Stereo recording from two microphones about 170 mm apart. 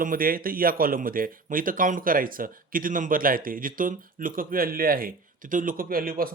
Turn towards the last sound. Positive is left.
turn(degrees=-60)  # may be behind; listen again after turning